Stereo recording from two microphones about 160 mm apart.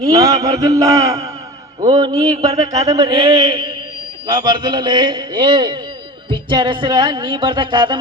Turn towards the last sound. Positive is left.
turn(degrees=-30)  # may be behind; listen again after turning